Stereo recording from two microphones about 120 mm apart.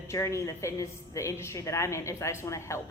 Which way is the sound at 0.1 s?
25° left (ahead or behind).